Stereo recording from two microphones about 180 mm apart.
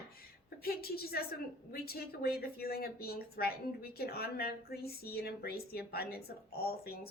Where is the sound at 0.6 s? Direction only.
60° left (ahead or behind).